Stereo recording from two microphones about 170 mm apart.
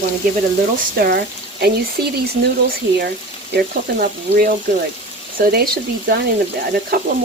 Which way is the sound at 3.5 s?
60° right (ahead or behind).